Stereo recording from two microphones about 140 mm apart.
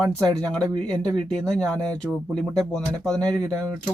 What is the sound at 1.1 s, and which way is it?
Speech, 5° left (ahead or behind).